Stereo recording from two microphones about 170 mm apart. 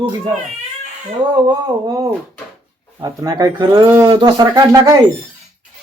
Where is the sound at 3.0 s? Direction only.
25° right (ahead or behind).